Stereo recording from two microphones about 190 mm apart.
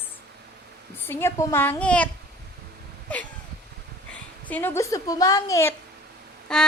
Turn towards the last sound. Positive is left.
turn(degrees=5)  # may be behind; listen again after turning